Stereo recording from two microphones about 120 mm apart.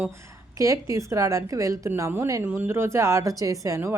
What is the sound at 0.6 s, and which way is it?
A woman's voice, 25° right (ahead or behind).